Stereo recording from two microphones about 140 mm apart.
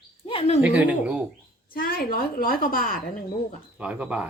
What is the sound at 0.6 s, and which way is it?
Speech, 10° right (ahead or behind).